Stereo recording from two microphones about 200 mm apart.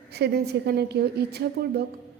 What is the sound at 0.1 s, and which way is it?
A woman's voice, 55° right (ahead or behind).